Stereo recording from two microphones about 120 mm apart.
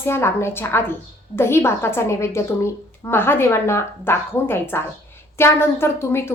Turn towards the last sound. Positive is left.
turn(degrees=20)  # may be behind; listen again after turning